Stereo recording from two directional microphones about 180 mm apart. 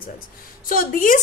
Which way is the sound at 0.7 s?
50° left (ahead or behind).